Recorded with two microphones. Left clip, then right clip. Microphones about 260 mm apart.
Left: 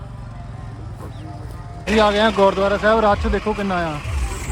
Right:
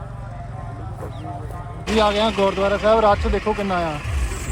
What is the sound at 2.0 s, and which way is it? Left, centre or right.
Speech, left.